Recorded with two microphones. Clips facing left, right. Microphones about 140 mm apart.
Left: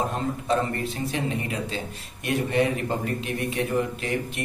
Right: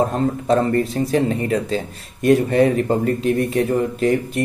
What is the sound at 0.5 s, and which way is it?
Speech, 40° right (ahead or behind).